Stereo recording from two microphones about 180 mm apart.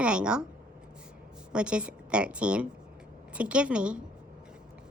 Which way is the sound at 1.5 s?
5° right (ahead or behind).